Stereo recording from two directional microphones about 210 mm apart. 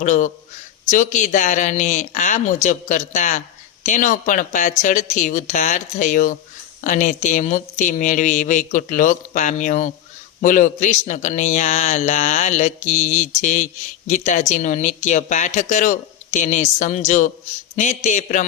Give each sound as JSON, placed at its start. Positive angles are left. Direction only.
{"t": 0.0, "sound": "a man's voice", "side_deg": 35}